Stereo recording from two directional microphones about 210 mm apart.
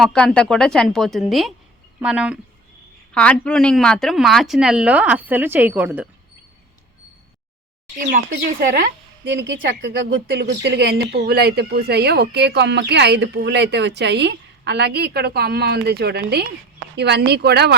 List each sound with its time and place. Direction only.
0.0 s a woman's voice: 5° left (ahead or behind)
8.1 s a woman's voice: 40° right (ahead or behind)